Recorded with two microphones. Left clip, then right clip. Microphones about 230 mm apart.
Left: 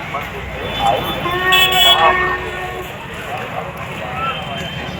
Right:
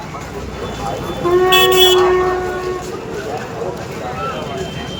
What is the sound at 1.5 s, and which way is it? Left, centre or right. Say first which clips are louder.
Vehicle: left 1 dB; right.